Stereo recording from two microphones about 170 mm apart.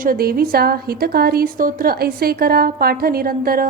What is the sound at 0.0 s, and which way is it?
A woman's voice, 60° right (ahead or behind).